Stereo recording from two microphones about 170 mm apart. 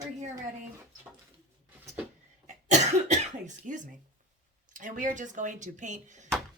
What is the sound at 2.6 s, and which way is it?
Speech, 45° right (ahead or behind).